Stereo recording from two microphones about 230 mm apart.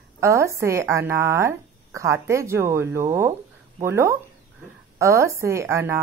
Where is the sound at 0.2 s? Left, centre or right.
Centre.